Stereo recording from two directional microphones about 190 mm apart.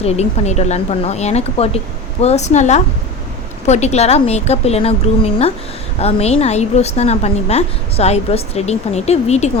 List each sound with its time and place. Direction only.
0.0 s a woman's voice: 35° left (ahead or behind)